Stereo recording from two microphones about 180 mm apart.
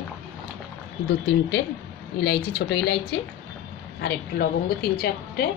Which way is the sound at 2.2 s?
70° left (ahead or behind).